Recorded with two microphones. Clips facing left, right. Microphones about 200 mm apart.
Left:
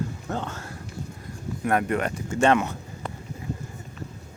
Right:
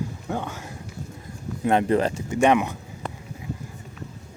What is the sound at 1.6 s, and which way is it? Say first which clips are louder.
Speech: right 4 dB; 25° right (ahead or behind).